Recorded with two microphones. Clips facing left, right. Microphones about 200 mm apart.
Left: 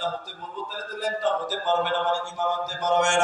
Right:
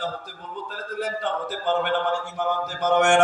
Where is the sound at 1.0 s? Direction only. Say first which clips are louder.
Left 2 dB; 60° right (ahead or behind).